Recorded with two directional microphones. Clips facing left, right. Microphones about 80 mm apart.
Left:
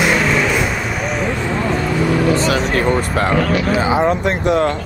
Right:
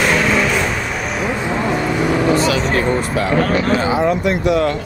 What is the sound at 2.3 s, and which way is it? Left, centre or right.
Vehicle, left.